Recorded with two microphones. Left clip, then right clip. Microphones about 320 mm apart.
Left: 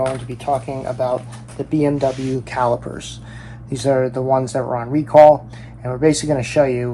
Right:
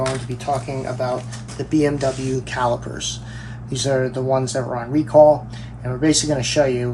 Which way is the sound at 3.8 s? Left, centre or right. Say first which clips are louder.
Left 3 dB; centre.